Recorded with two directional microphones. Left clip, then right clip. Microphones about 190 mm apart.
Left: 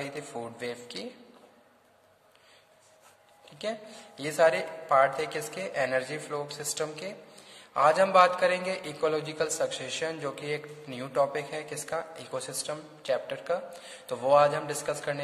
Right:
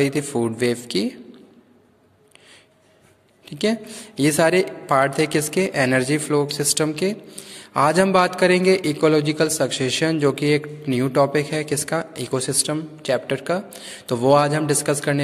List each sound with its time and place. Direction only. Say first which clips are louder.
0.0 s a man's voice: right 15 dB; 35° right (ahead or behind)
3.4 s a man's voice: right 12 dB; 35° right (ahead or behind)